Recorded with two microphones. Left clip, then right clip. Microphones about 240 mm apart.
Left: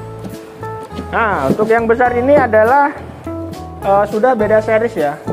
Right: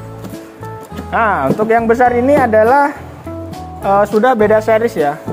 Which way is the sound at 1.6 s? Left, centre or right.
Right.